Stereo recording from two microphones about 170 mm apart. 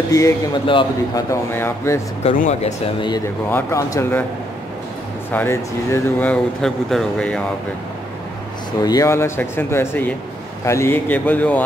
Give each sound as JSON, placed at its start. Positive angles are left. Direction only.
{"t": 0.1, "sound": "a man's voice", "side_deg": 25}
{"t": 1.3, "sound": "speech", "side_deg": 15}
{"t": 2.6, "sound": "a man's voice", "side_deg": 30}
{"t": 3.4, "sound": "speech", "side_deg": 15}
{"t": 5.3, "sound": "speech", "side_deg": 15}
{"t": 8.8, "sound": "speech", "side_deg": 20}